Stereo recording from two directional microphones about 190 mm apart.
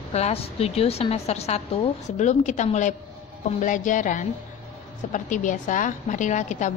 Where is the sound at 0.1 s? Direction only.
35° left (ahead or behind).